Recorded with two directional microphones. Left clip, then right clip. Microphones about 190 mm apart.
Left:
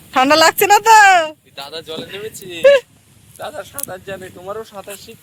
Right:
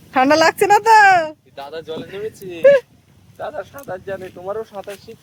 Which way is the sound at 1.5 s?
45° right (ahead or behind).